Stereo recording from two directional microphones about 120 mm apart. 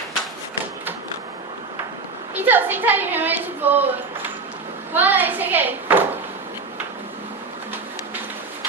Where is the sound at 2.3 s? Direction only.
15° right (ahead or behind).